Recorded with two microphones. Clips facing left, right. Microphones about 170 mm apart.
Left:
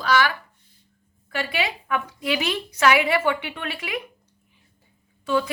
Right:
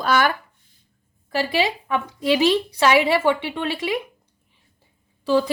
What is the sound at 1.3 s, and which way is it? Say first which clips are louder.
A woman's voice: right 5 dB; 30° right (ahead or behind).